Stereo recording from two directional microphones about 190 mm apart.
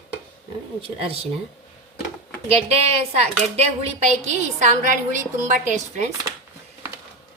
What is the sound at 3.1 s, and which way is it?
A woman's voice, 35° right (ahead or behind).